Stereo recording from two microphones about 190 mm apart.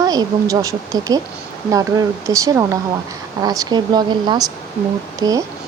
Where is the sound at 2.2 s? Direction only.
15° right (ahead or behind).